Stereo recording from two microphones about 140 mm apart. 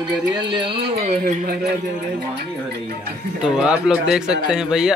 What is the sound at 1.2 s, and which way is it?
Speech, 90° right.